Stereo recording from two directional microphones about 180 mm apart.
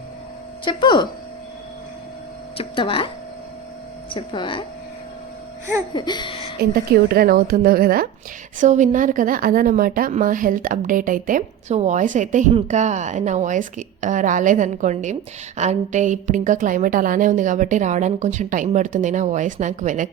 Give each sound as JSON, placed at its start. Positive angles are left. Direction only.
{"t": 0.6, "sound": "speech", "side_deg": 25}
{"t": 2.6, "sound": "speech", "side_deg": 30}
{"t": 4.1, "sound": "speech", "side_deg": 25}
{"t": 5.9, "sound": "speech", "side_deg": 25}
{"t": 7.1, "sound": "a woman's voice", "side_deg": -55}
{"t": 8.5, "sound": "a woman's voice", "side_deg": -45}